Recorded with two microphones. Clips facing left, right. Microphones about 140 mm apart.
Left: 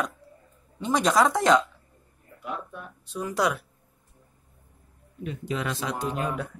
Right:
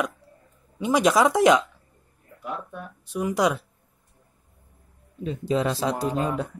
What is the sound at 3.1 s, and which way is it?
Speech, 15° right (ahead or behind).